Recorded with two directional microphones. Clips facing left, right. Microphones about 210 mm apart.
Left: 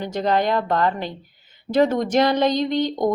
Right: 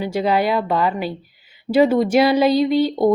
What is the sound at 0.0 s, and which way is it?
Speech, 5° right (ahead or behind).